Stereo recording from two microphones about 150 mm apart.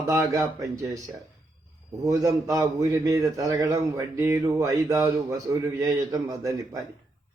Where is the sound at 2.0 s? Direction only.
25° right (ahead or behind).